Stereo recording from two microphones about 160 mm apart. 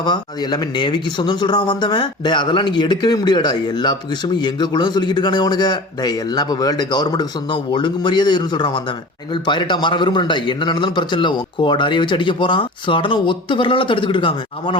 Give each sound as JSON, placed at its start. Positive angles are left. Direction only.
{"t": 0.0, "sound": "a man's voice", "side_deg": 30}